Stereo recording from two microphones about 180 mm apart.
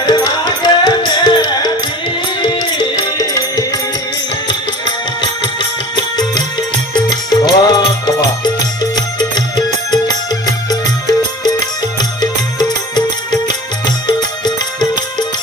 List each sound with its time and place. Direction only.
0.0 s music: 25° left (ahead or behind)
5.2 s music: 25° left (ahead or behind)